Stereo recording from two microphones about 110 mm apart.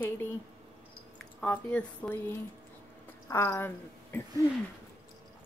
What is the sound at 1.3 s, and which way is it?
Speech, 10° left (ahead or behind).